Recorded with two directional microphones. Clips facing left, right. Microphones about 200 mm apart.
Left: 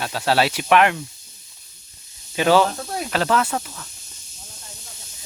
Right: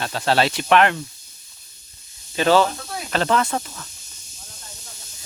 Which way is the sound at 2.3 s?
10° left (ahead or behind).